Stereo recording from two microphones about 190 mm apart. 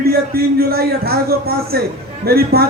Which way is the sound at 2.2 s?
55° right (ahead or behind).